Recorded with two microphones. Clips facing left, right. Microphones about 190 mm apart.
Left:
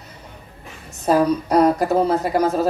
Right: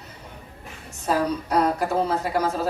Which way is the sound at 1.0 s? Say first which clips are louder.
Left 6 dB; 40° left (ahead or behind).